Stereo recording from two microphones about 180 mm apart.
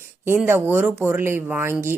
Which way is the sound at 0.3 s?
10° right (ahead or behind).